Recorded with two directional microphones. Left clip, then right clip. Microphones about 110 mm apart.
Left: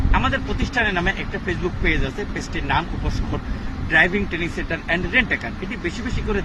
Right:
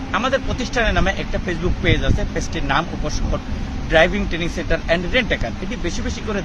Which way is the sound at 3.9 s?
30° right (ahead or behind).